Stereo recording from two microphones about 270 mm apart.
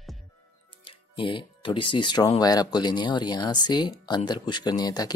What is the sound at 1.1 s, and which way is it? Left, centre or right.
Speech, centre.